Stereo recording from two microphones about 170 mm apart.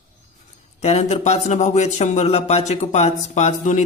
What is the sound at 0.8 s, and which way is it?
Speech, 40° left (ahead or behind).